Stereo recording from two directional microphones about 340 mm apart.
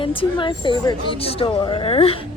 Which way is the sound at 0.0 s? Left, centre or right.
Centre.